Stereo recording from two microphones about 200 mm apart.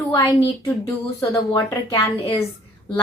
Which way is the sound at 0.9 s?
15° left (ahead or behind).